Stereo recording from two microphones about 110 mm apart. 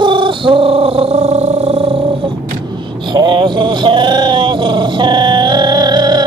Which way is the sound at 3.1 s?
40° right (ahead or behind).